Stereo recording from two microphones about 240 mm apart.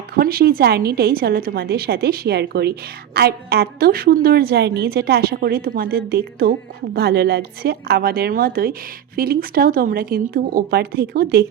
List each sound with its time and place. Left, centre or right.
0.1 s a woman's voice: right